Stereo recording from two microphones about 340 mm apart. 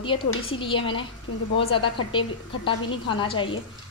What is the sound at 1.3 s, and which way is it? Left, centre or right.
Speech, left.